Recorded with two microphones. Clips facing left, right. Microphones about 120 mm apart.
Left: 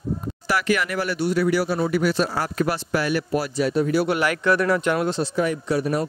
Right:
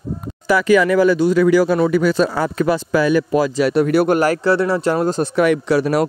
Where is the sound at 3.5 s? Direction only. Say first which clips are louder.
Right 3 dB; 80° right; by 4.2 s 60° right (ahead or behind).